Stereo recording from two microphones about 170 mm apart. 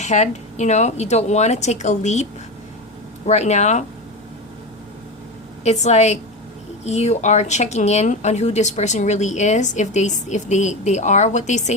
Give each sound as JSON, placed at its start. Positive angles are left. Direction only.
{"t": 0.0, "sound": "speech", "side_deg": 45}
{"t": 3.2, "sound": "speech", "side_deg": 40}
{"t": 5.6, "sound": "speech", "side_deg": 40}